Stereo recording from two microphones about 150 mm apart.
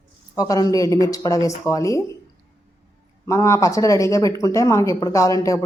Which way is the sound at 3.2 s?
20° left (ahead or behind).